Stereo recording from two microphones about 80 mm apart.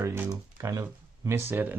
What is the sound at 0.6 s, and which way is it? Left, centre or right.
Speech, right.